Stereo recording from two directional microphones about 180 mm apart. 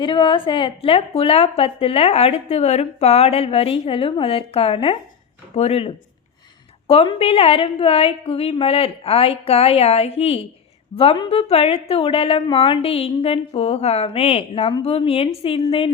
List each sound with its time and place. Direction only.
0.0 s a woman's voice: 25° left (ahead or behind)